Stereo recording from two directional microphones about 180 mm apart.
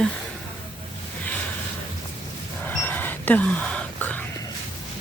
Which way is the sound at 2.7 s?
10° left (ahead or behind).